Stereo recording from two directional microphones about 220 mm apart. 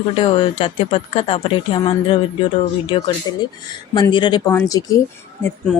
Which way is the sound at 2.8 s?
25° left (ahead or behind).